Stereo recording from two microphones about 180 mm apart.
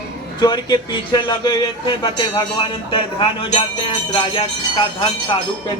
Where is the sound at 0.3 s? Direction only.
25° left (ahead or behind).